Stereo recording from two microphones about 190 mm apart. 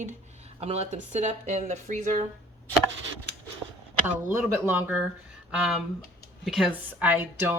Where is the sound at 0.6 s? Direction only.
35° right (ahead or behind).